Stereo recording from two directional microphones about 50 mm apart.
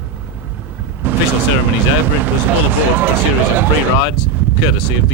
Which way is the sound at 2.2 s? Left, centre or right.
Right.